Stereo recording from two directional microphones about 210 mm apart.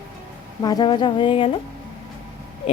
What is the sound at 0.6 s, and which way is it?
Speech, 20° left (ahead or behind).